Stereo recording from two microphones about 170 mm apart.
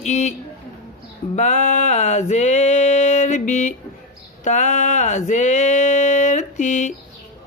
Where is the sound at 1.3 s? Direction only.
45° left (ahead or behind).